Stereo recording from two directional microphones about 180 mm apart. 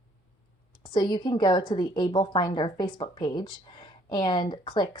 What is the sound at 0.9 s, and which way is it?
Speech, 25° left (ahead or behind).